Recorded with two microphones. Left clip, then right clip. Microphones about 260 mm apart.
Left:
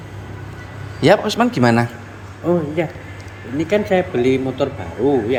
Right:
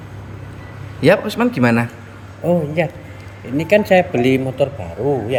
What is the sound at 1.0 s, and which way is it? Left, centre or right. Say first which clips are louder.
Speech: even; centre.